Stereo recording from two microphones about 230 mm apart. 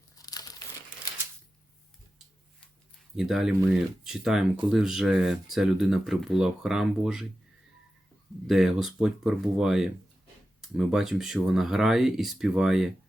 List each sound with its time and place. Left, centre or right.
0.2 s crumpling: centre
3.2 s speech: centre
8.4 s speech: centre